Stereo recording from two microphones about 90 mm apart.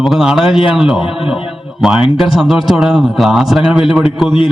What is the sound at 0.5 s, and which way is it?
Speech, 80° left.